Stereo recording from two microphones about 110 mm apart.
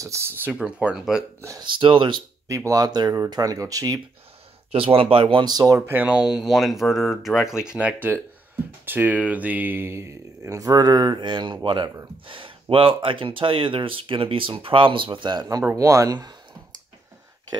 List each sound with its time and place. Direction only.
0.0 s speech: 25° right (ahead or behind); by 1.2 s 5° right (ahead or behind)
1.6 s speech: 50° right (ahead or behind)
2.4 s speech: 30° right (ahead or behind)
4.7 s speech: 60° right (ahead or behind); by 5.8 s 35° right (ahead or behind)
5.8 s speech: 15° right (ahead or behind); by 16.3 s 35° right (ahead or behind)